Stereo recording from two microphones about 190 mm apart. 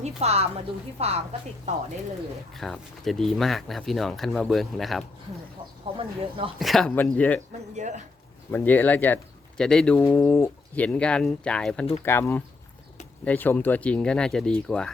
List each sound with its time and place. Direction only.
0.2 s speech: 35° right (ahead or behind)
2.5 s speech: centre (ahead or behind)
6.0 s speech: 30° right (ahead or behind)
6.6 s speech: centre (ahead or behind)
7.8 s speech: 40° right (ahead or behind)
8.4 s speech: 10° left (ahead or behind)
13.2 s speech: 10° left (ahead or behind)